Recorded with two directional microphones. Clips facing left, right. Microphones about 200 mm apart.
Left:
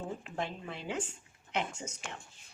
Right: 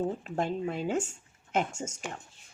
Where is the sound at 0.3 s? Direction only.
45° right (ahead or behind).